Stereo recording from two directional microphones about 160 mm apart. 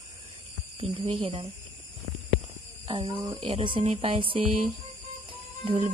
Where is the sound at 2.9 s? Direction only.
30° right (ahead or behind).